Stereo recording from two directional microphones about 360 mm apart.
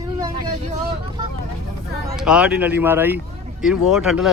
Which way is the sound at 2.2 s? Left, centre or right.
Centre.